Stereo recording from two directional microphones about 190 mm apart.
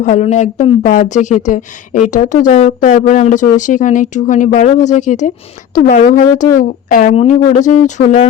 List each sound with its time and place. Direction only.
0.0 s speech: 40° left (ahead or behind)